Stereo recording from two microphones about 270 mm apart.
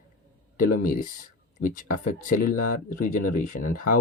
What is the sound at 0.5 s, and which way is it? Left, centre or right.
Speech, left.